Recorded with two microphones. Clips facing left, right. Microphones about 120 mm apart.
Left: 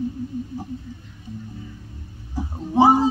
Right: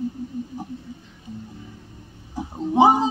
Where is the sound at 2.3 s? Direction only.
15° right (ahead or behind).